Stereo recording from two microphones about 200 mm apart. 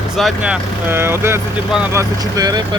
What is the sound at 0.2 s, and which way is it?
Speech, 5° right (ahead or behind).